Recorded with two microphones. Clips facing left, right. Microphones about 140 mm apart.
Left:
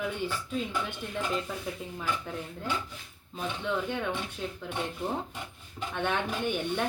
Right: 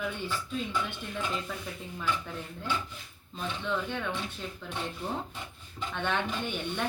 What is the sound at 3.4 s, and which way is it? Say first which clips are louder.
Speech: left 1 dB; 15° left (ahead or behind).